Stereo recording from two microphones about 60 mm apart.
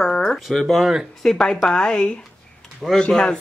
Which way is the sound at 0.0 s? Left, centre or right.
Centre.